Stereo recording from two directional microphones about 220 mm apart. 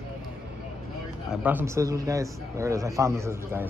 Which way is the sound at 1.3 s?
10° right (ahead or behind).